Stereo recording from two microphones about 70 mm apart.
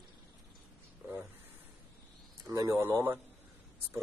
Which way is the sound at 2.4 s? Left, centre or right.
Right.